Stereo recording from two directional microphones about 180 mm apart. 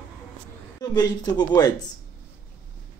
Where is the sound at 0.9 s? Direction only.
20° left (ahead or behind).